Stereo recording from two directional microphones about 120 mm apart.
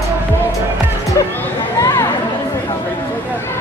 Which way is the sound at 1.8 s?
25° left (ahead or behind).